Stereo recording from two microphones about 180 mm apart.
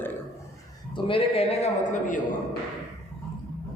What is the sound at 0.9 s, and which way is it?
A man's voice, 30° left (ahead or behind).